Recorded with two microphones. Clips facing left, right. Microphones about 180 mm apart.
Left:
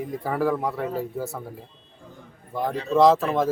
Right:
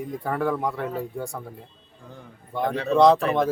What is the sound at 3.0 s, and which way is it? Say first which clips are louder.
Speech: even; centre (ahead or behind).